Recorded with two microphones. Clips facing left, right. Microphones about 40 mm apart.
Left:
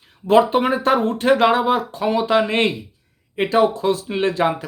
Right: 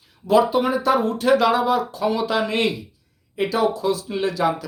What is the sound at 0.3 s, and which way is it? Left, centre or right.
Speech, left.